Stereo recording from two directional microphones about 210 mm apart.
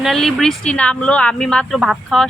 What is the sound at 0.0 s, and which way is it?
Speech, centre (ahead or behind).